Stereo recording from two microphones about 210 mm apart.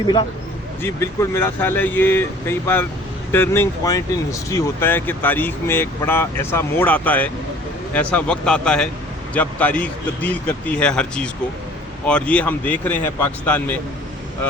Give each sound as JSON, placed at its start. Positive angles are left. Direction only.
{"t": 0.8, "sound": "a man's voice", "side_deg": 10}